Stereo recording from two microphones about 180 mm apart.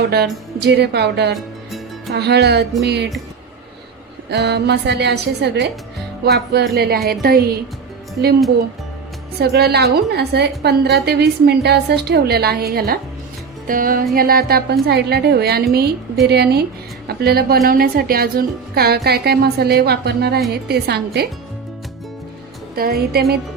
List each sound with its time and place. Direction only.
0.1 s a woman's voice: 65° right (ahead or behind)
4.3 s a woman's voice: 65° right (ahead or behind)
9.4 s a woman's voice: 65° right (ahead or behind)
22.7 s a woman's voice: 60° right (ahead or behind)